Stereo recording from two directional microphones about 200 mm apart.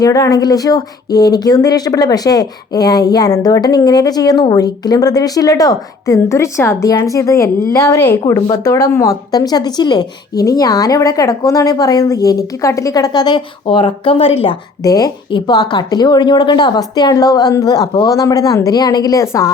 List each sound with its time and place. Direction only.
0.0 s speech: 15° left (ahead or behind)
14.8 s speech: 20° left (ahead or behind)